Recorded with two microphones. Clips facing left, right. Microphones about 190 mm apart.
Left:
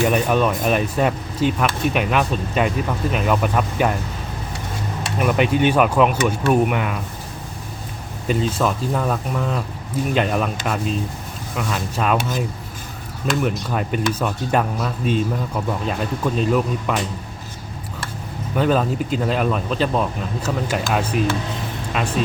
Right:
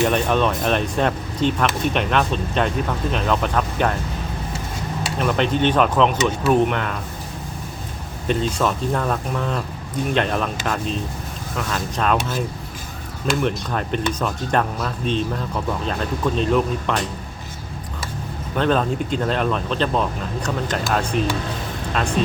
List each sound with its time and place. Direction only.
0.0 s speech: 10° left (ahead or behind)
5.0 s speech: 10° left (ahead or behind)
8.3 s speech: 5° left (ahead or behind)
13.4 s speech: 5° left (ahead or behind)
18.5 s speech: 5° left (ahead or behind)